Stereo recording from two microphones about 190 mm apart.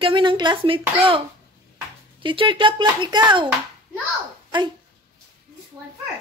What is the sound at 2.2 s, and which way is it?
A woman's voice, 25° right (ahead or behind).